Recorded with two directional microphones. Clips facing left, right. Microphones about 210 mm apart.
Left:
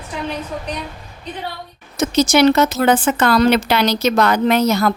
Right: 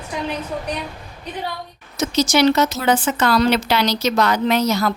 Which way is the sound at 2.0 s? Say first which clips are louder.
Left 3 dB; 55° left (ahead or behind).